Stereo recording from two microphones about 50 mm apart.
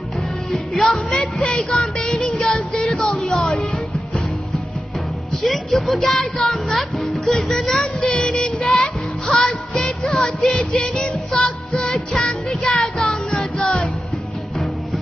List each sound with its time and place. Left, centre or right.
0.5 s music: centre
1.8 s child singing: centre
3.4 s music: centre
5.4 s music: centre
7.8 s music: centre